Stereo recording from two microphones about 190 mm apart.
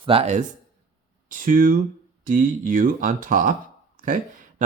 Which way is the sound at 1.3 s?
45° right (ahead or behind).